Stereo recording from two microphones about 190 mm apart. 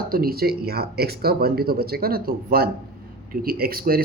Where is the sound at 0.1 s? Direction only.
50° right (ahead or behind).